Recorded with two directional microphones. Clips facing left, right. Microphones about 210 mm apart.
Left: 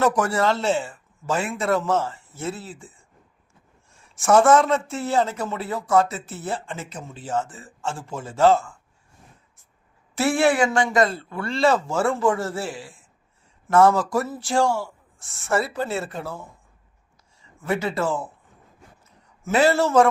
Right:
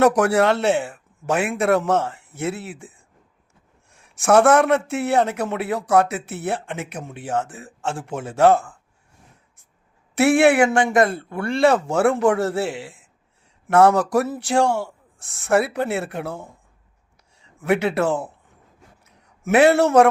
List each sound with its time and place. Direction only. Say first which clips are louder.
0.0 s speech: right 5 dB; 65° right (ahead or behind)
10.2 s speech: right 5 dB; 65° right (ahead or behind)
10.9 s a man's voice: right 3 dB; 55° right (ahead or behind)
19.0 s a sound: right 5 dB; 65° right (ahead or behind)